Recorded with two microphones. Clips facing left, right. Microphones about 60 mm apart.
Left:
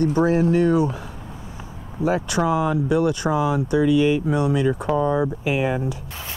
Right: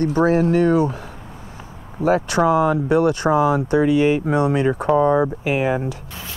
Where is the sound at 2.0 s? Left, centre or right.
Right.